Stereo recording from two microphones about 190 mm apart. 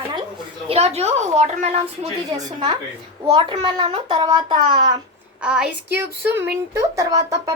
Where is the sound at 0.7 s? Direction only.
35° right (ahead or behind).